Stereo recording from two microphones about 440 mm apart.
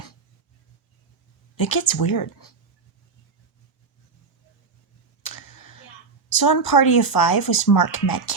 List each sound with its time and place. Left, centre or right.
1.5 s speech: left
5.2 s a sound: left
6.2 s speech: left